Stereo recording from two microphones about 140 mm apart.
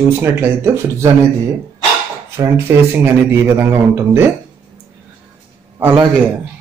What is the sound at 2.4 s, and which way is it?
A man's voice, 15° right (ahead or behind).